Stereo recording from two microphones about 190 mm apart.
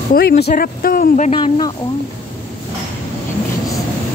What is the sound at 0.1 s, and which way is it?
Speech, 55° left (ahead or behind).